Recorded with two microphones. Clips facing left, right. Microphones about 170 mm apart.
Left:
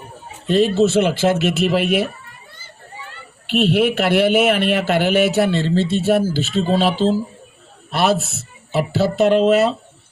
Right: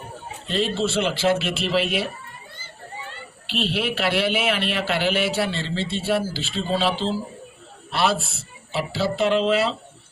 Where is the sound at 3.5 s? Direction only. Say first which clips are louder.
Left 9 dB; 50° left (ahead or behind).